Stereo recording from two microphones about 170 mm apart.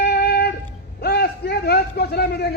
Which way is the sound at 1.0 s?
70° left (ahead or behind).